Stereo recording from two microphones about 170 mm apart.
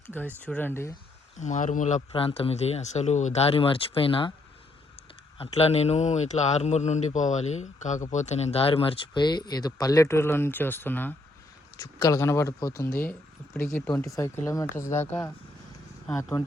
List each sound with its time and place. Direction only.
0.3 s speech: 10° left (ahead or behind)
1.4 s speech: 45° left (ahead or behind)
2.1 s a man's voice: 35° left (ahead or behind)
5.4 s a man's voice: 35° left (ahead or behind); by 15.3 s 10° left (ahead or behind)